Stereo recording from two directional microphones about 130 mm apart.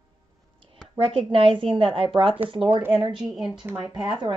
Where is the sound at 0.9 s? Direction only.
45° right (ahead or behind).